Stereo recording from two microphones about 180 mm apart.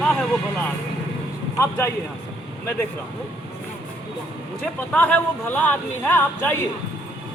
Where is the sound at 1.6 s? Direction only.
15° left (ahead or behind).